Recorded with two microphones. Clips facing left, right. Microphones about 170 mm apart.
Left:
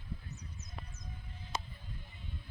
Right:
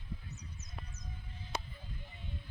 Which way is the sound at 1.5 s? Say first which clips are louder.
Even; 65° right (ahead or behind).